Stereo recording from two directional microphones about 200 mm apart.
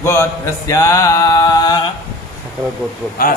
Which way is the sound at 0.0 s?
15° left (ahead or behind).